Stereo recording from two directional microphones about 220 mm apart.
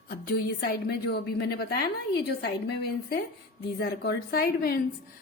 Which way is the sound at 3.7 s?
50° left (ahead or behind).